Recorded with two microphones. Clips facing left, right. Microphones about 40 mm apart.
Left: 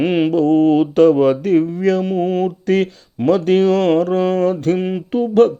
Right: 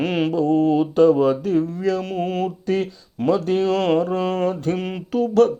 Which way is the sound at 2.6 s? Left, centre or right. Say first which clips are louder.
Left 6 dB; left.